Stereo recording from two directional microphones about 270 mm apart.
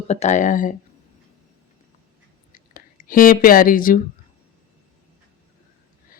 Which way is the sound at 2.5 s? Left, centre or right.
Left.